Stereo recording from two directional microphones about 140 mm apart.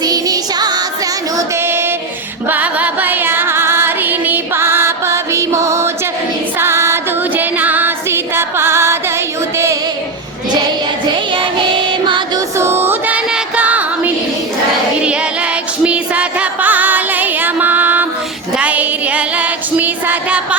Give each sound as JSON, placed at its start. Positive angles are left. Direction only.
{"t": 0.0, "sound": "music", "side_deg": -30}
{"t": 1.4, "sound": "female singing", "side_deg": -15}
{"t": 2.5, "sound": "music", "side_deg": -10}
{"t": 6.6, "sound": "female singing", "side_deg": -20}
{"t": 12.5, "sound": "music", "side_deg": -15}
{"t": 15.8, "sound": "music", "side_deg": -10}
{"t": 18.5, "sound": "child singing", "side_deg": -10}